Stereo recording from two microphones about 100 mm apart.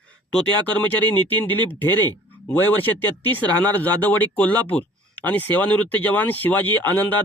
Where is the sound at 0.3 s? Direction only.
15° left (ahead or behind).